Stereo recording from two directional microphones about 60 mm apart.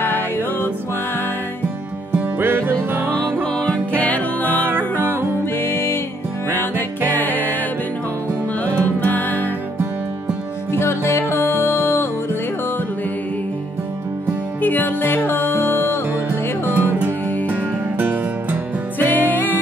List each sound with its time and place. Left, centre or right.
0.0 s music: left
2.3 s music: right
3.5 s music: centre
4.0 s music: left
4.7 s music: right
5.6 s music: left
7.1 s music: left
9.0 s music: left
10.7 s music: left
14.6 s music: left
16.7 s music: right
18.9 s music: left